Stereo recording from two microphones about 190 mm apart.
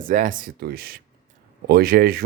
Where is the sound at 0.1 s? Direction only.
45° right (ahead or behind).